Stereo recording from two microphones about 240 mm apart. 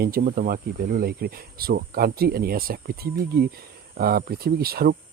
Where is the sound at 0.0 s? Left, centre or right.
Right.